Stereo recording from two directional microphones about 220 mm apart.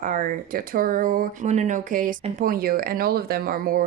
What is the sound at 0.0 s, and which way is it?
Speech, 35° right (ahead or behind).